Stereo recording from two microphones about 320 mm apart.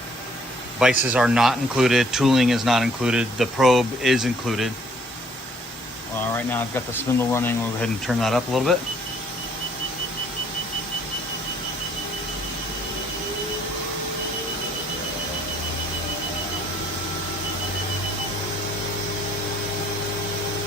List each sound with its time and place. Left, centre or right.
0.8 s speech: centre
6.3 s speech: centre